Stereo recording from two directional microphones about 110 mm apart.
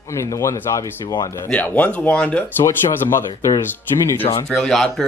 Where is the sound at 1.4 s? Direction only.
15° left (ahead or behind).